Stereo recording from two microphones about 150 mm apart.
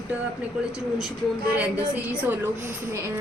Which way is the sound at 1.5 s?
10° right (ahead or behind).